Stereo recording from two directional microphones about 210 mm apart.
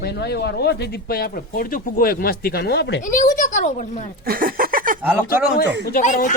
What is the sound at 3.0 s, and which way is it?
Speech, 40° left (ahead or behind).